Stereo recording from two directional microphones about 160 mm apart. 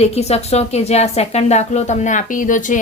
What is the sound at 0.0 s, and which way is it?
A woman's voice, 40° left (ahead or behind).